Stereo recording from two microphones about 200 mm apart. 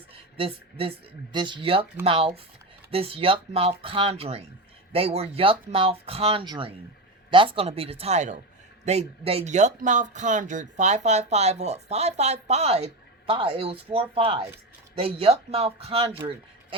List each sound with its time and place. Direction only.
0.3 s speech: 25° right (ahead or behind)